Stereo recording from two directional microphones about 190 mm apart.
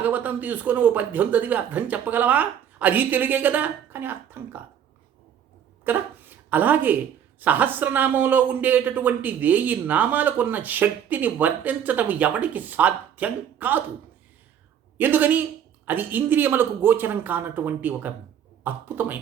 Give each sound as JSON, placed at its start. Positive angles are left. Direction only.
{"t": 0.0, "sound": "a woman's voice", "side_deg": -10}
{"t": 5.9, "sound": "a woman's voice", "side_deg": -10}
{"t": 14.9, "sound": "a woman's voice", "side_deg": -10}